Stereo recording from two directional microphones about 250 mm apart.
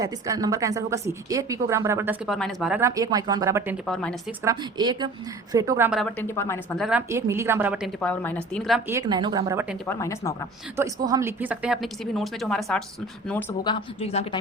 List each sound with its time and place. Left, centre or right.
0.0 s a woman's voice: centre
3.8 s speech: centre
4.4 s a woman's voice: centre
7.1 s a woman's voice: centre
8.9 s a woman's voice: centre
9.8 s speech: centre
10.8 s speech: centre
13.7 s a woman's voice: left